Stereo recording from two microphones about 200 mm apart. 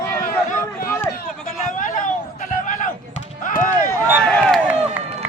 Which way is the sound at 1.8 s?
40° left (ahead or behind).